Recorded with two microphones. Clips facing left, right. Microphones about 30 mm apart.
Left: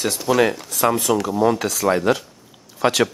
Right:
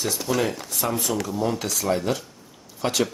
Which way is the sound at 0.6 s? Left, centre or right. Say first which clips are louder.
Left 7 dB; left.